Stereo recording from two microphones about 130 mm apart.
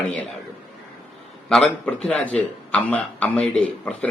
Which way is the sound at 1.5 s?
5° left (ahead or behind).